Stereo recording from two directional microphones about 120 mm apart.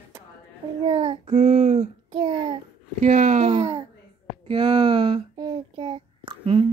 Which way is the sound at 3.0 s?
90° right.